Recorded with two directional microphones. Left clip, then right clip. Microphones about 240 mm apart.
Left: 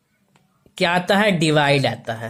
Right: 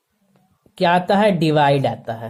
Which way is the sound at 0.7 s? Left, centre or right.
Centre.